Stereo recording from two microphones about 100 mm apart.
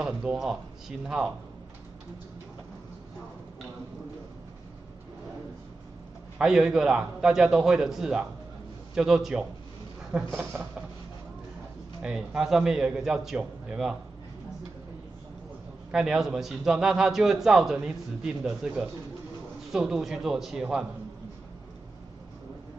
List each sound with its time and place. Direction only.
0.0 s speech: 10° right (ahead or behind)
6.3 s a man's voice: 5° right (ahead or behind)
10.5 s a sound: 20° right (ahead or behind)
12.0 s a man's voice: 5° right (ahead or behind)
15.9 s a man's voice: 5° right (ahead or behind)